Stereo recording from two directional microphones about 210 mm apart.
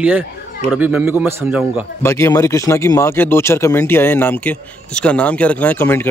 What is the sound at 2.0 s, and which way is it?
Speech, 15° left (ahead or behind).